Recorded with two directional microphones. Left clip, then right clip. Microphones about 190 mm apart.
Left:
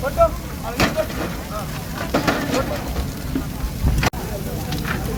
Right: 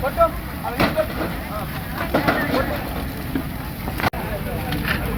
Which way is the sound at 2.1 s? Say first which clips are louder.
Right 1 dB; 5° right (ahead or behind).